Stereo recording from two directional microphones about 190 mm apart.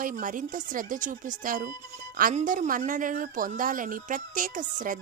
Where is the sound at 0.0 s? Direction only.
45° right (ahead or behind).